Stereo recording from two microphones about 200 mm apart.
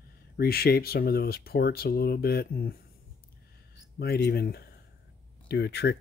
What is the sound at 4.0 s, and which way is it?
Speech, 50° left (ahead or behind).